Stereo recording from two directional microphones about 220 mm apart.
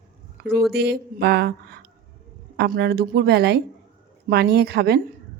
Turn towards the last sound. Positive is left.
turn(degrees=-45)  # may be behind; listen again after turning